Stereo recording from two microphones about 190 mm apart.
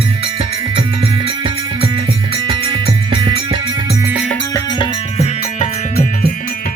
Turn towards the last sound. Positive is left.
turn(degrees=35)  # may be behind; listen again after turning